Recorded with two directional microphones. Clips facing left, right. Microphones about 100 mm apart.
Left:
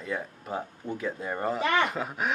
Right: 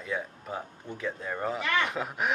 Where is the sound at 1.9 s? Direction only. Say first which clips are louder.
Even; centre (ahead or behind).